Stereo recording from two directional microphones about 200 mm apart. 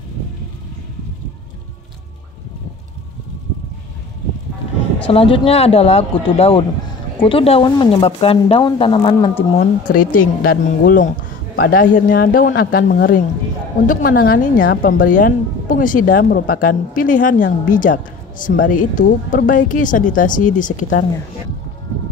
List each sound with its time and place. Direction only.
5.0 s speech: 25° left (ahead or behind)
9.1 s speech: 15° left (ahead or behind)
9.6 s speech: 45° left (ahead or behind)